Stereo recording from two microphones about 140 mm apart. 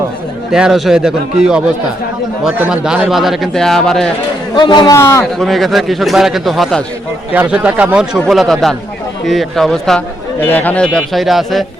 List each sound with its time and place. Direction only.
0.5 s a man's voice: 5° right (ahead or behind)
4.5 s a man's voice: 30° left (ahead or behind)
4.9 s a man's voice: 20° left (ahead or behind)
5.2 s a man's voice: centre (ahead or behind)
7.3 s a man's voice: 10° right (ahead or behind)